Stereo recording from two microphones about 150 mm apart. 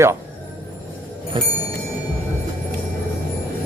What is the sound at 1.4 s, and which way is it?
Speech, 30° right (ahead or behind).